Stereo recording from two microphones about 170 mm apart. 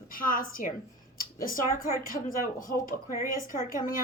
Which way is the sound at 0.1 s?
55° left (ahead or behind).